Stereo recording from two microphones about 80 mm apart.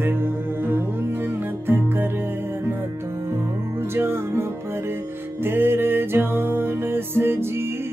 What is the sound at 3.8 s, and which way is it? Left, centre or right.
Music, right.